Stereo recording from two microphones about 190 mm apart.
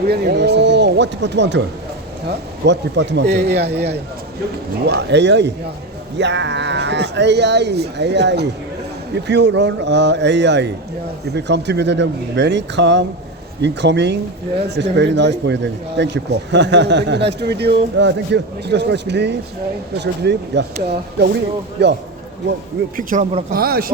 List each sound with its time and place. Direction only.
0.0 s speech: 55° right (ahead or behind)
21.8 s speech: 65° right (ahead or behind)
23.0 s speech: 45° right (ahead or behind)